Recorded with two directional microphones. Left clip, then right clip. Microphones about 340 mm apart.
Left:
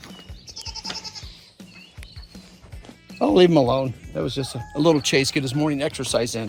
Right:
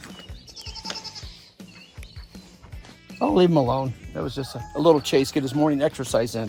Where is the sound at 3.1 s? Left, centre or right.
Left.